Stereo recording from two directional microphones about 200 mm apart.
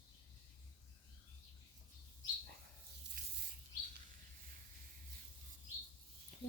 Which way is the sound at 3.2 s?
40° right (ahead or behind).